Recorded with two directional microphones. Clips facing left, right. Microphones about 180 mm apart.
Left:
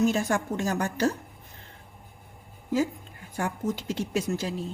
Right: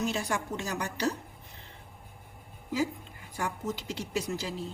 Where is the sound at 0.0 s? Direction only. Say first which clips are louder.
Left 7 dB; 45° left (ahead or behind).